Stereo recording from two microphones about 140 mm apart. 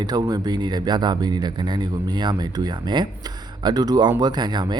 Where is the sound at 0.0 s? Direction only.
30° right (ahead or behind).